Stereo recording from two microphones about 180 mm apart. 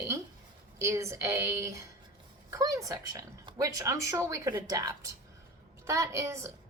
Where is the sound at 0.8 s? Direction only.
15° right (ahead or behind).